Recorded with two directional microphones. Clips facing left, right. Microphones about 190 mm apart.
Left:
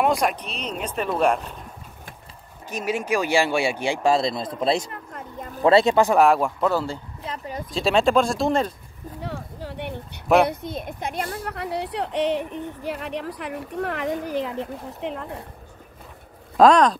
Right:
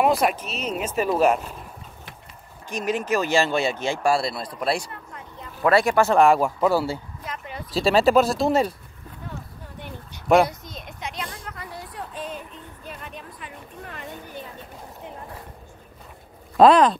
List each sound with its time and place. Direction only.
0.0 s speech: centre (ahead or behind)
2.7 s speech: 10° left (ahead or behind)
6.1 s speech: centre (ahead or behind)
7.2 s a sound: 35° left (ahead or behind)
7.7 s speech: 5° right (ahead or behind)
9.6 s dog: 75° left (ahead or behind)
10.4 s a woman's voice: 60° left (ahead or behind); by 15.2 s 75° left (ahead or behind)
16.5 s speech: 5° right (ahead or behind)